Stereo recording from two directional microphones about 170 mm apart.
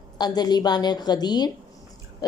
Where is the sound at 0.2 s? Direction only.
25° left (ahead or behind).